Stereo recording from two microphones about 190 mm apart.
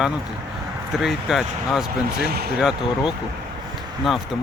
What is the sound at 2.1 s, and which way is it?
Speech, 55° right (ahead or behind).